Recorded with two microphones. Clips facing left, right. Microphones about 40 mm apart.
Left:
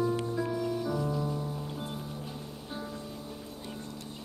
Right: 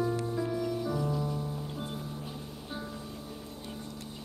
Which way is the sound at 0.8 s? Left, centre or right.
Centre.